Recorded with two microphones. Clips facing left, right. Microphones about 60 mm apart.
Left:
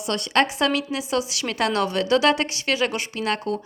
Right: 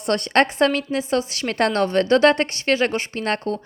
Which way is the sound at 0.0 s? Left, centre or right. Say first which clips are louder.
Right 3 dB; right.